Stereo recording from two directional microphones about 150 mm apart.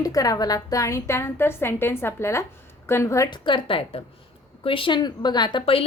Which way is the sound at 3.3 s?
30° left (ahead or behind).